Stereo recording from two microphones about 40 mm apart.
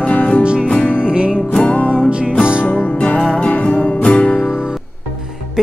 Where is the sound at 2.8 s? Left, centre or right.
Left.